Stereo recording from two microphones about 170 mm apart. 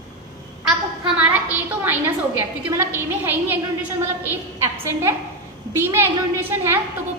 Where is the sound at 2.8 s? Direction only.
15° right (ahead or behind).